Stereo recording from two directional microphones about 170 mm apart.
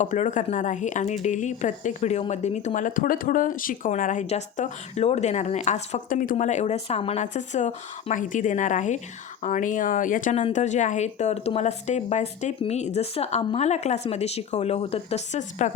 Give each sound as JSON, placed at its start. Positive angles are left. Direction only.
{"t": 0.0, "sound": "a woman's voice", "side_deg": 45}